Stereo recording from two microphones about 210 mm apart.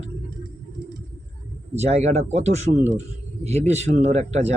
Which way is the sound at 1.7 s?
30° right (ahead or behind).